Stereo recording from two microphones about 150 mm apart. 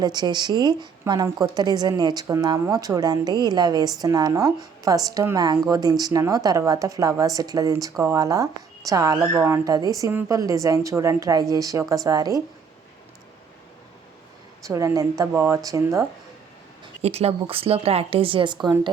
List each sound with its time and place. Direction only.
0.0 s a woman's voice: 30° right (ahead or behind)
14.6 s a woman's voice: 20° right (ahead or behind)
17.0 s a woman's voice: 45° right (ahead or behind)